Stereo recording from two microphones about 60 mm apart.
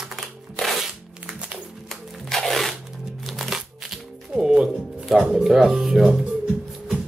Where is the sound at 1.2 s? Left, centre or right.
Centre.